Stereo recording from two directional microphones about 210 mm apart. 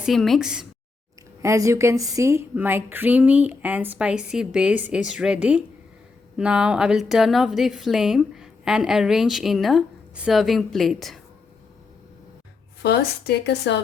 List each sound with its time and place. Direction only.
0.0 s a woman's voice: centre (ahead or behind)
1.4 s a woman's voice: 15° right (ahead or behind)
12.8 s speech: 50° left (ahead or behind)